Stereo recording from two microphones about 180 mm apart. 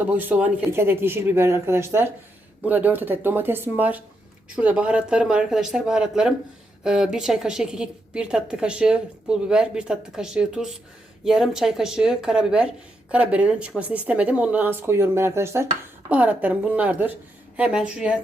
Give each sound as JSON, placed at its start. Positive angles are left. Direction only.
{"t": 0.1, "sound": "a woman's voice", "side_deg": -10}